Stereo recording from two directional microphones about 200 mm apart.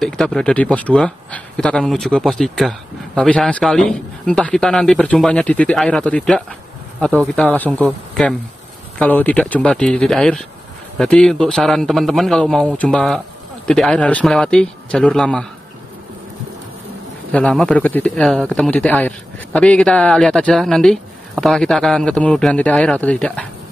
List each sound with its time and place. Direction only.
0.0 s speech: centre (ahead or behind)
17.3 s speech: 5° left (ahead or behind)